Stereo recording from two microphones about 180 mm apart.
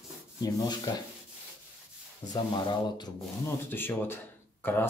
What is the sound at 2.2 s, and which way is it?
Sanding, 20° left (ahead or behind).